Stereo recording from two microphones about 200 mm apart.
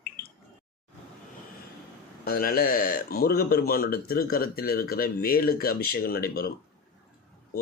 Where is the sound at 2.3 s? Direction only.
50° left (ahead or behind).